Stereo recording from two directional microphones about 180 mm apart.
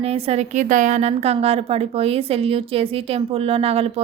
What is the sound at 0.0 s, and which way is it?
A woman's voice, 35° right (ahead or behind).